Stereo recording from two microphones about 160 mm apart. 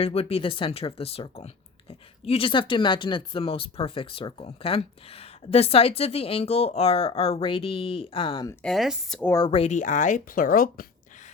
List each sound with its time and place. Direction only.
0.0 s speech: 35° left (ahead or behind)
8.6 s speech: centre (ahead or behind)
9.2 s speech: 20° left (ahead or behind)
9.5 s speech: 40° left (ahead or behind); by 10.8 s 60° left (ahead or behind)